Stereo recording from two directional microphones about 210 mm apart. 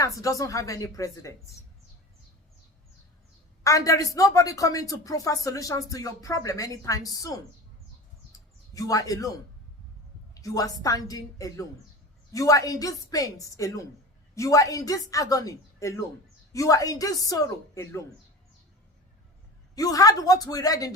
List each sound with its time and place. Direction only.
0.0 s speech: 15° left (ahead or behind)
3.6 s speech: 15° left (ahead or behind)
8.3 s bird: 15° left (ahead or behind)
10.3 s speech: 15° left (ahead or behind)
19.7 s speech: 15° left (ahead or behind)